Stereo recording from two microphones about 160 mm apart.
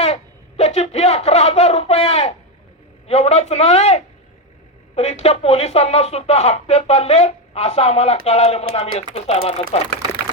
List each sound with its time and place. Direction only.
0.0 s speech: 40° left (ahead or behind)